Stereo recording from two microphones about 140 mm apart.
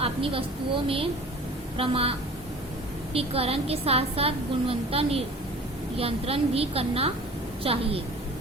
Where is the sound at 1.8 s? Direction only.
40° right (ahead or behind).